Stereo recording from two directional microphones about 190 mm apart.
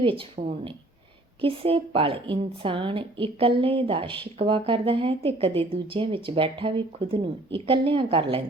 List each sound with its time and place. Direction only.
0.0 s a woman's voice: 30° right (ahead or behind)